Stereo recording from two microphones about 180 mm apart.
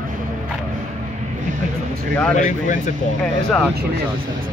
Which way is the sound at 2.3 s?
45° left (ahead or behind).